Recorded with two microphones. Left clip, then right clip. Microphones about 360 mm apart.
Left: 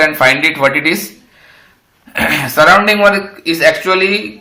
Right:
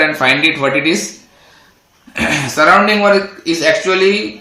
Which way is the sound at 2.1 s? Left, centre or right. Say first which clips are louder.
Left 3 dB; left.